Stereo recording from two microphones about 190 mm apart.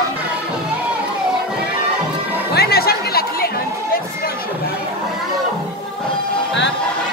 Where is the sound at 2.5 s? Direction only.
55° left (ahead or behind).